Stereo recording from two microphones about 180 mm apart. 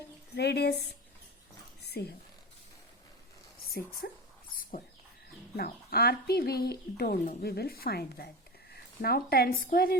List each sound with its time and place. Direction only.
0.3 s speech: 65° left (ahead or behind)
1.8 s a sound: 65° left (ahead or behind)
4.0 s speech: 55° left (ahead or behind)
5.5 s speech: 60° left (ahead or behind)